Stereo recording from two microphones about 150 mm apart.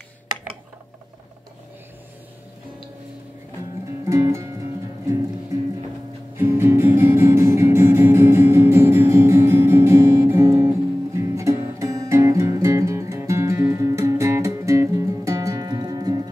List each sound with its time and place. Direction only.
4.0 s music: 20° right (ahead or behind)
6.3 s music: 15° right (ahead or behind)